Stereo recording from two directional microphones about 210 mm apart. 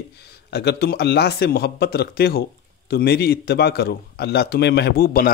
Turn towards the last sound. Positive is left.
turn(degrees=45)  # may be behind; listen again after turning